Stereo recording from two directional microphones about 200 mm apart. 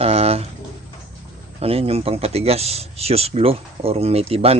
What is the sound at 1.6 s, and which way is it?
Speech, 30° right (ahead or behind).